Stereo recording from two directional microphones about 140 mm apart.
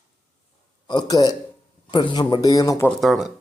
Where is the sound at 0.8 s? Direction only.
30° left (ahead or behind).